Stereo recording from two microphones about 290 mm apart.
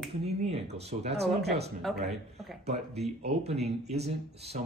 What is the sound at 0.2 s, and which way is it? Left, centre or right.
Speech, right.